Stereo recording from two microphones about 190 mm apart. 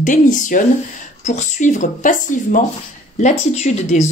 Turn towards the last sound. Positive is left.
turn(degrees=40)  # may be behind; listen again after turning